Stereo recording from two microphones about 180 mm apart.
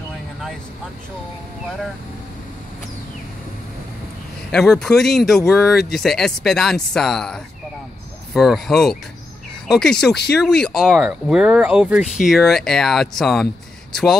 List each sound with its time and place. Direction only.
4.5 s speech: 5° left (ahead or behind)